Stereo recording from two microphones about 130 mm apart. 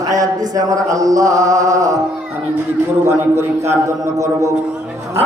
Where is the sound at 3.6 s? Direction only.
20° right (ahead or behind).